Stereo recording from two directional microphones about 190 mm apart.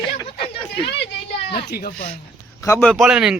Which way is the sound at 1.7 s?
55° left (ahead or behind).